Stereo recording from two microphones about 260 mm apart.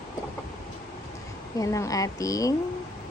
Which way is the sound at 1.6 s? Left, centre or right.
Centre.